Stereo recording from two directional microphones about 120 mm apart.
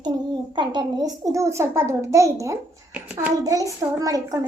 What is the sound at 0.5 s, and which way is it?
A child's voice, 40° right (ahead or behind).